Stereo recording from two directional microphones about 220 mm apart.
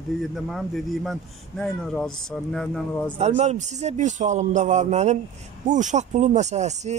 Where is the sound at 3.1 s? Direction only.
30° right (ahead or behind).